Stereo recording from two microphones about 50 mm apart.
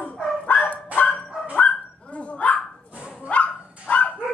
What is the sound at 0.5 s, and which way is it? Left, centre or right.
Dog, left.